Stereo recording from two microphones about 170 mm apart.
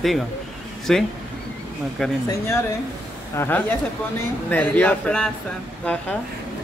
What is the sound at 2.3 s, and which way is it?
Speech, 15° left (ahead or behind).